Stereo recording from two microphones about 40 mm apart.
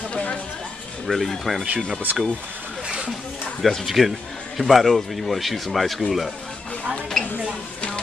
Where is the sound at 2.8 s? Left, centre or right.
Right.